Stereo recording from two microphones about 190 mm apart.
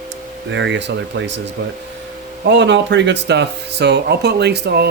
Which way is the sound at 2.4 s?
65° right (ahead or behind).